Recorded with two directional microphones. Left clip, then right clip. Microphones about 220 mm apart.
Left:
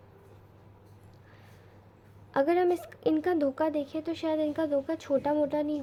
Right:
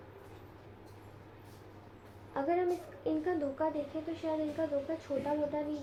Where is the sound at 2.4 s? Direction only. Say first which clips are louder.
Left 7 dB; 45° left (ahead or behind).